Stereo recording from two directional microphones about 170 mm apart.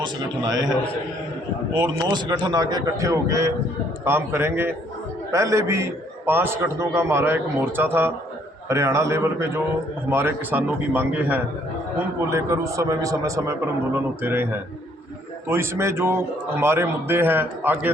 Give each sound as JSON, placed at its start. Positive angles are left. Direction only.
{"t": 0.0, "sound": "a man's voice", "side_deg": -20}
{"t": 1.7, "sound": "a man's voice", "side_deg": -25}
{"t": 15.4, "sound": "a man's voice", "side_deg": -15}